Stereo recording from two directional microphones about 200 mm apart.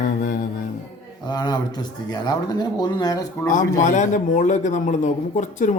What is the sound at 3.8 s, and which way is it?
Speech, 40° left (ahead or behind).